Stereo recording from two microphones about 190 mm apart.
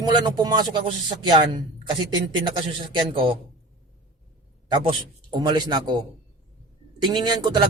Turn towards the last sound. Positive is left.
turn(degrees=-25)  # may be behind; listen again after turning